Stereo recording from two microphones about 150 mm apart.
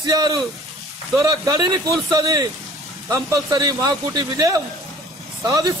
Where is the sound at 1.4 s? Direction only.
25° right (ahead or behind).